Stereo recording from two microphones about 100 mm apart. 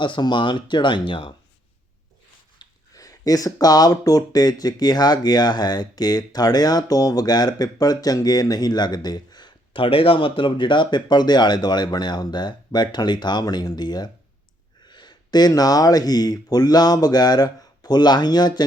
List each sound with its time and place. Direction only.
0.0 s speech: 50° left (ahead or behind)
2.6 s speech: 35° left (ahead or behind)
9.7 s speech: 65° left (ahead or behind); by 18.6 s 45° left (ahead or behind)